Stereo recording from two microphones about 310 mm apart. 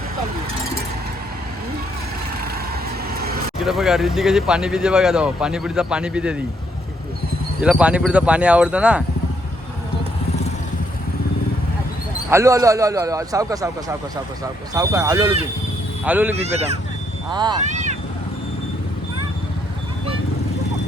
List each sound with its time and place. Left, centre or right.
3.6 s speech: centre
7.6 s speech: centre
12.3 s a man's voice: centre
14.7 s a man's voice: centre
16.4 s speech: right